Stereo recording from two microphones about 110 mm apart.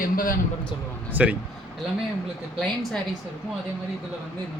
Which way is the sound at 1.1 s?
15° right (ahead or behind).